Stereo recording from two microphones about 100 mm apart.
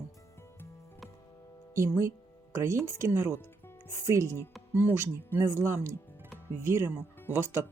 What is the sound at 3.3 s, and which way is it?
Music, 20° left (ahead or behind).